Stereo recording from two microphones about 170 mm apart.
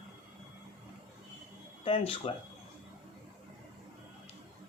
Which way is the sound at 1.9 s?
35° left (ahead or behind).